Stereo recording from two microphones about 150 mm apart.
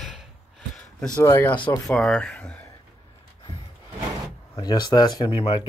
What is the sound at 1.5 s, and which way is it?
Speech, 30° left (ahead or behind).